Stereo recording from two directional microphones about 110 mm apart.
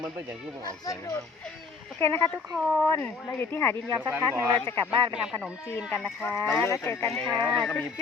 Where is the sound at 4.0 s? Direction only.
20° right (ahead or behind).